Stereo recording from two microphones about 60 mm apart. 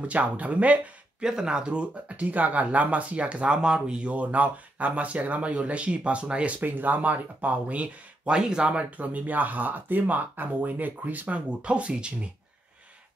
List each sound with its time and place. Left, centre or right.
0.0 s speech: right
1.2 s speech: centre
6.6 s speech: right